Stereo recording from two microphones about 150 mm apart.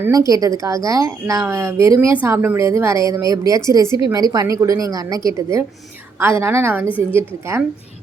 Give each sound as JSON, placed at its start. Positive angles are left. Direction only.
{"t": 0.0, "sound": "a woman's voice", "side_deg": -20}